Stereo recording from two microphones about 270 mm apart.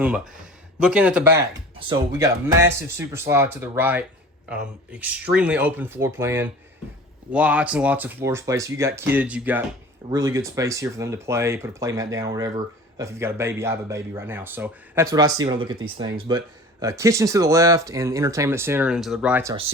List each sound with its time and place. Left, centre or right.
0.8 s speech: centre